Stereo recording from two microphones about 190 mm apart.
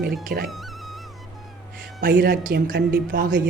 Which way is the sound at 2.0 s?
50° right (ahead or behind).